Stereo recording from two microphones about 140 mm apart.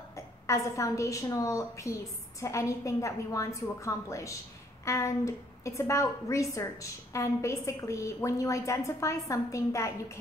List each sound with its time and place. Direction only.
0.1 s a woman's voice: 20° left (ahead or behind)